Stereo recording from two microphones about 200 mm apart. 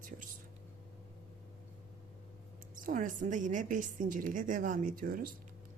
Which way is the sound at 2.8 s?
40° right (ahead or behind).